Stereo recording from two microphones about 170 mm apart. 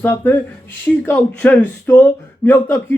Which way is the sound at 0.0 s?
15° left (ahead or behind).